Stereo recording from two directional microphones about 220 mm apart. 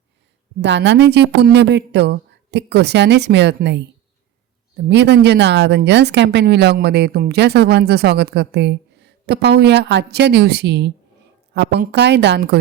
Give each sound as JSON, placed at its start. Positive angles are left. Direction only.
{"t": 0.6, "sound": "speech", "side_deg": -55}
{"t": 4.9, "sound": "speech", "side_deg": -50}